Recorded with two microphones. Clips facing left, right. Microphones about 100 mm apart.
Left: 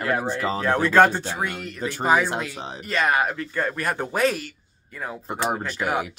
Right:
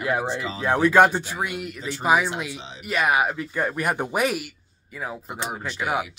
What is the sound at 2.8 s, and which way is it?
Speech, 10° right (ahead or behind).